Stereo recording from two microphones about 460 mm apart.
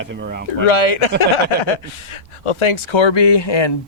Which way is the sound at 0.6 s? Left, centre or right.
Left.